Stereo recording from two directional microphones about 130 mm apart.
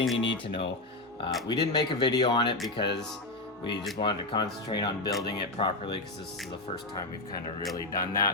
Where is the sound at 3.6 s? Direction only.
35° left (ahead or behind).